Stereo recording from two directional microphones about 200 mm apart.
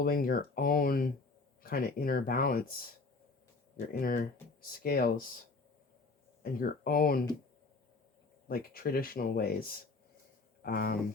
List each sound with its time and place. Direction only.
0.0 s speech: 45° left (ahead or behind)
4.0 s speech: 45° left (ahead or behind)
6.4 s speech: 45° left (ahead or behind)
8.4 s speech: 45° left (ahead or behind)
10.6 s speech: 50° left (ahead or behind)